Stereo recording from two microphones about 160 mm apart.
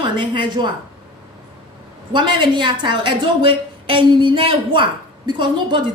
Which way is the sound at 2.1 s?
30° right (ahead or behind).